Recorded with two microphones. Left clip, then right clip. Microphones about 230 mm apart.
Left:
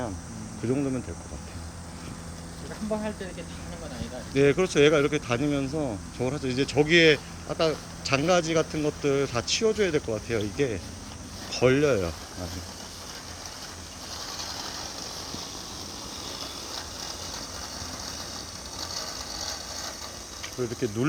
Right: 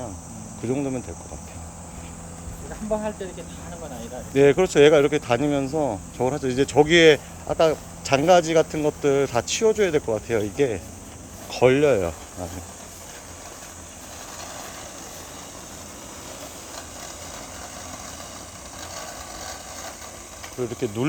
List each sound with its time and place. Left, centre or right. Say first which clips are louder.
0.6 s speech: right 2 dB; centre
4.4 s speech: right 5 dB; centre
20.6 s speech: right 3 dB; centre